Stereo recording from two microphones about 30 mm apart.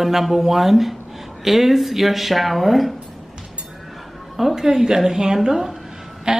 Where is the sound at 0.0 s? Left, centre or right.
Centre.